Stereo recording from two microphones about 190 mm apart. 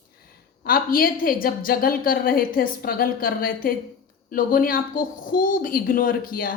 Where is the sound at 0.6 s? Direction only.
50° left (ahead or behind).